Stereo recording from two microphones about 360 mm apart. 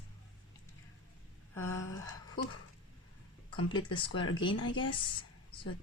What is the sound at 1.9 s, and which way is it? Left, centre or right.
Speech, left.